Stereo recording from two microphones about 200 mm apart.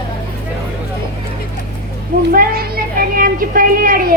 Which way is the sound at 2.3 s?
45° right (ahead or behind).